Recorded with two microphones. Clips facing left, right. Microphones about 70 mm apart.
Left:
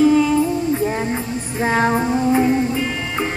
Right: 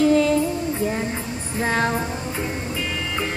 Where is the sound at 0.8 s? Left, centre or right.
Centre.